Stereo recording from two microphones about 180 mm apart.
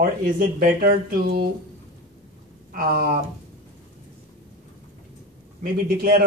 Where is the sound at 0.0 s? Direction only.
50° right (ahead or behind).